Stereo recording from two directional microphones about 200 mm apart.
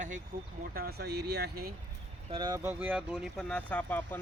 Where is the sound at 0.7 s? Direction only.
50° right (ahead or behind).